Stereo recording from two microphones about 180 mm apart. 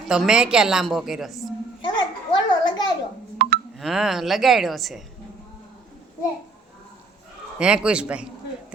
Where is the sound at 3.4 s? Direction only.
65° right (ahead or behind).